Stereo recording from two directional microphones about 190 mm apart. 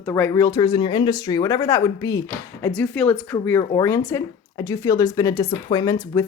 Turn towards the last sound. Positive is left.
turn(degrees=20)  # may be behind; listen again after turning